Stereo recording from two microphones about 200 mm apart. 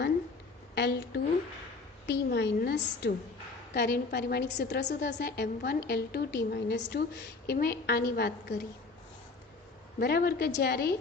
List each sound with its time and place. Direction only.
0.8 s a woman's voice: 55° left (ahead or behind)
10.0 s a woman's voice: 50° left (ahead or behind)